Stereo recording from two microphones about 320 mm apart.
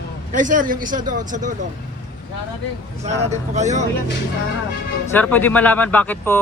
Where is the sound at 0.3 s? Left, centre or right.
Right.